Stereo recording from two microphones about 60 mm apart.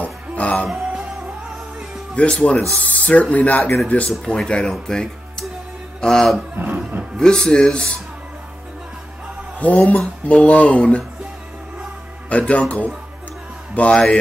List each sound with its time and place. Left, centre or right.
0.0 s music: left
2.1 s a man's voice: centre
6.5 s speech: right
7.2 s a man's voice: centre
9.6 s speech: left
12.3 s speech: left